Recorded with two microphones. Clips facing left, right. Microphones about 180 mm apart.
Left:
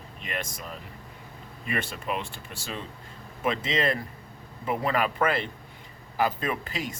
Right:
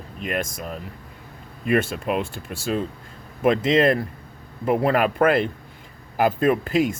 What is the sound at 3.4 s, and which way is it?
Speech, 55° right (ahead or behind).